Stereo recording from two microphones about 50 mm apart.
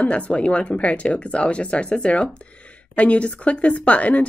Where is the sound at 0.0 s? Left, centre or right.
Left.